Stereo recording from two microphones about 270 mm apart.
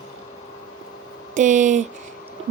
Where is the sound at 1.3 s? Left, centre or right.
Right.